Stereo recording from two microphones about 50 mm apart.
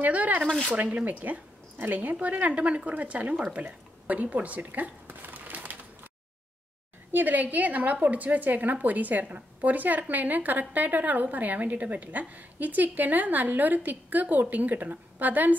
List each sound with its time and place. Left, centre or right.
0.0 s a woman's voice: right
1.0 s a woman's voice: right
5.0 s crumpling: right
7.1 s a woman's voice: right